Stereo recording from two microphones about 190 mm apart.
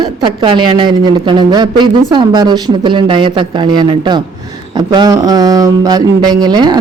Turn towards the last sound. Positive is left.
turn(degrees=-20)  # may be behind; listen again after turning